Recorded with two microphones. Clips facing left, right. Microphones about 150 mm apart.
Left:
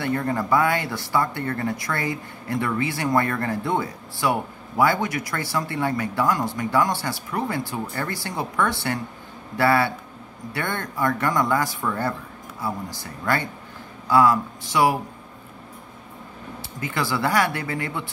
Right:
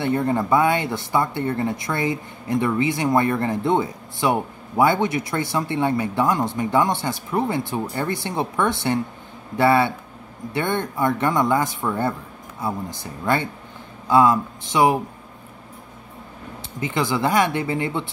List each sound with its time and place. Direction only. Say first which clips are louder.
0.0 s speech: right 3 dB; 20° right (ahead or behind)
16.8 s speech: right 3 dB; 20° right (ahead or behind)